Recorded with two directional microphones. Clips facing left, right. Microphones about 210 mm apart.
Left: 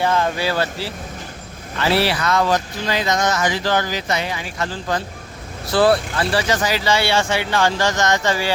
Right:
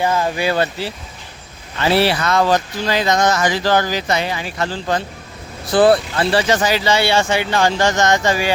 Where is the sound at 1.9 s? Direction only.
25° right (ahead or behind).